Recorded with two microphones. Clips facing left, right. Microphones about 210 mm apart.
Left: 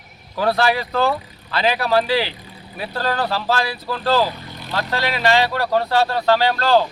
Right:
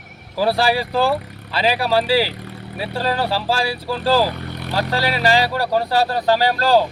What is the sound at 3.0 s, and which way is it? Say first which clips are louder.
Speech: right 1 dB; 5° right (ahead or behind).